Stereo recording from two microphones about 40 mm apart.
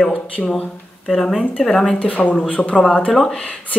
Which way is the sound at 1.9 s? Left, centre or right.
Left.